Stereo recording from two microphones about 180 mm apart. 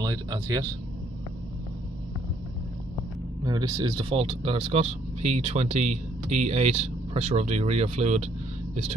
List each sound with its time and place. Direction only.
0.0 s speech: 20° right (ahead or behind)
3.4 s speech: 20° right (ahead or behind); by 8.3 s 35° right (ahead or behind)